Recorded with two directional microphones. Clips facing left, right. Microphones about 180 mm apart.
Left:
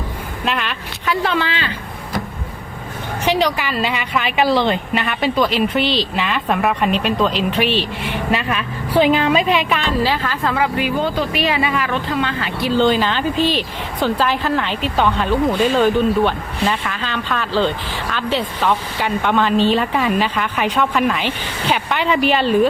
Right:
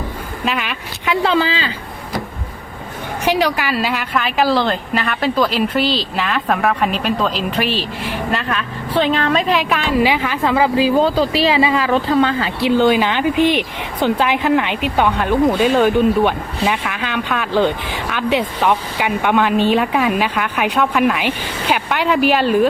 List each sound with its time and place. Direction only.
0.4 s a woman's voice: 5° right (ahead or behind)
1.1 s speech: 30° right (ahead or behind)
3.2 s a woman's voice: 10° right (ahead or behind)
9.9 s speech: 15° right (ahead or behind)
12.7 s speech: 10° right (ahead or behind)
19.8 s a woman's voice: 5° right (ahead or behind)